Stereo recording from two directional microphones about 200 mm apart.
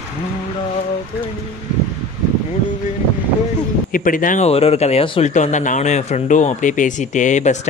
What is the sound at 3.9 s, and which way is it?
Speech, 45° left (ahead or behind).